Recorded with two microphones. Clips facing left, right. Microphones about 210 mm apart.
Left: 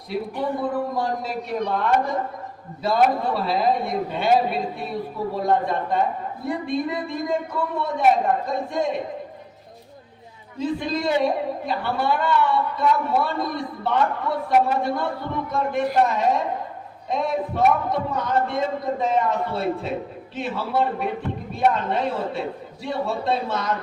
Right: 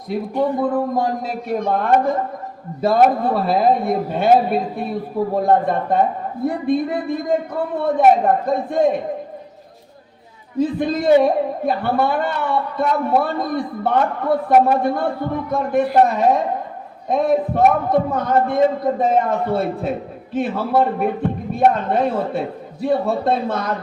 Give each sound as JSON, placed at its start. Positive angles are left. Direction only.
{"t": 0.3, "sound": "a man's voice", "side_deg": -50}
{"t": 10.6, "sound": "a man's voice", "side_deg": -55}